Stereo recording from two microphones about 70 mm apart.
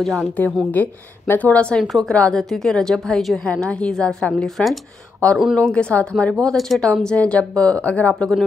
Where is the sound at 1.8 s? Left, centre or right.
Centre.